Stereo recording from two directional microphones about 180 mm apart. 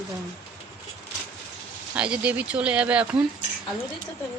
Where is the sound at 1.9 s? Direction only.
5° right (ahead or behind).